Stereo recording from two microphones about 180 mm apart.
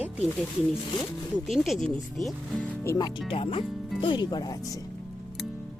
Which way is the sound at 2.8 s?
20° left (ahead or behind).